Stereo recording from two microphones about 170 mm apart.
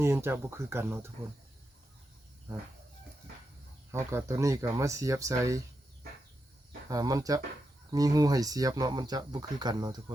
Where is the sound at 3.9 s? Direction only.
15° right (ahead or behind).